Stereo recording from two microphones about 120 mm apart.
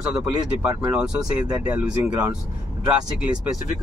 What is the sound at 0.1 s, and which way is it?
Speech, 10° right (ahead or behind).